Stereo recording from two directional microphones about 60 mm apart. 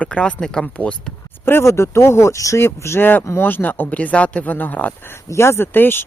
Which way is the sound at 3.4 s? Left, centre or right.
Left.